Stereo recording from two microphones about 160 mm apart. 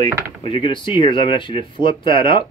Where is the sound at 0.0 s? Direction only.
30° left (ahead or behind).